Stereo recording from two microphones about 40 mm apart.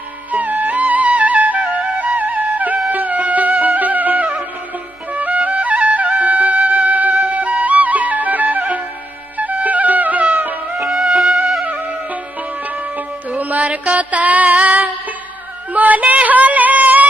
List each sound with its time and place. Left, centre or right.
0.3 s music: right
10.8 s music: centre
11.6 s music: right
13.3 s music: right